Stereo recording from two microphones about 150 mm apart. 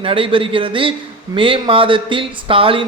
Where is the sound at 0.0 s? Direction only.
35° right (ahead or behind).